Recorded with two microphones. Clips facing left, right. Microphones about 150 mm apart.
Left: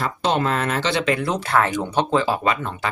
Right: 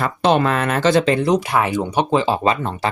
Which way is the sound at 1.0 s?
30° right (ahead or behind).